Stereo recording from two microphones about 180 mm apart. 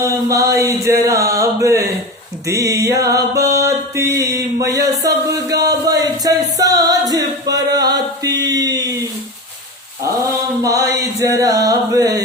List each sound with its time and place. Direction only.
0.0 s music: 15° right (ahead or behind)
8.4 s speech: 20° right (ahead or behind)
10.6 s a sound: 20° right (ahead or behind)